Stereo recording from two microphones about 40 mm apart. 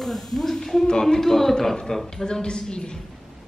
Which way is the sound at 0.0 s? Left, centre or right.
Centre.